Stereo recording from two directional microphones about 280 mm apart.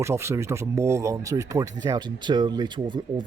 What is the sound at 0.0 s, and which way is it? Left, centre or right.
Speech, centre.